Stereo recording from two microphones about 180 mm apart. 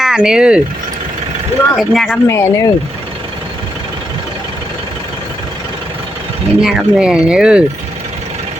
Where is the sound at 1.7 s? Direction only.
Centre (ahead or behind).